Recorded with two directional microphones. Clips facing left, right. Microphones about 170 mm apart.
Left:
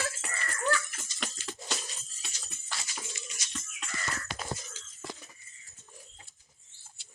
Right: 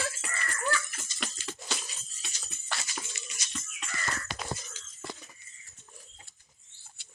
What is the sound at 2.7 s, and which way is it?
Music, 65° right (ahead or behind).